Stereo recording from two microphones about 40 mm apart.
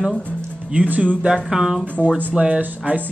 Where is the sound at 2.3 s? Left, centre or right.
Right.